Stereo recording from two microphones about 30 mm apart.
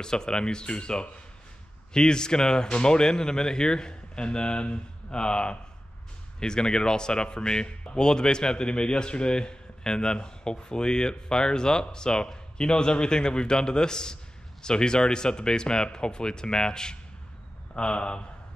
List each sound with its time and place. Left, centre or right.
0.0 s a man's voice: left